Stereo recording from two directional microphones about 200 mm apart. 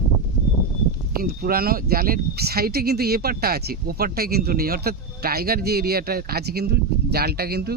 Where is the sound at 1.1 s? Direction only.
45° right (ahead or behind).